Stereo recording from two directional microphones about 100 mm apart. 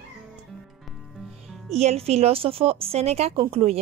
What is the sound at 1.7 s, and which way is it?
A woman's voice, 90° right.